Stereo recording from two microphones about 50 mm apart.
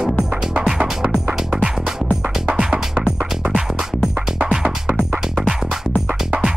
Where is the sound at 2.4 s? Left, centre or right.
Right.